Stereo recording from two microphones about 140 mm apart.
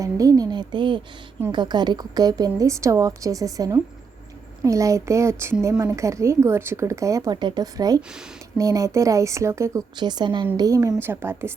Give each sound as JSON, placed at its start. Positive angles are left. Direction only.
{"t": 0.0, "sound": "a woman's voice", "side_deg": -25}
{"t": 10.0, "sound": "a woman's voice", "side_deg": -30}